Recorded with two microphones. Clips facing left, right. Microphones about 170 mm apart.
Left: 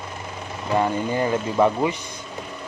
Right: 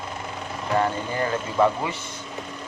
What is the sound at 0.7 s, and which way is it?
Speech, 15° left (ahead or behind).